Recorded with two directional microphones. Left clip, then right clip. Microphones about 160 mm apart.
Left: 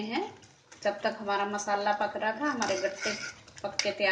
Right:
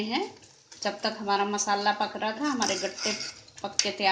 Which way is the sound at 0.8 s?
60° right (ahead or behind).